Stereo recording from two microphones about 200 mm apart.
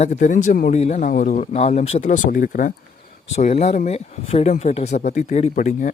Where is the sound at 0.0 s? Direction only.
40° left (ahead or behind).